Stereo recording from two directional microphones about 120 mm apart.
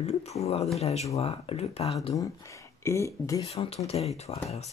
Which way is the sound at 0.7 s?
60° left (ahead or behind).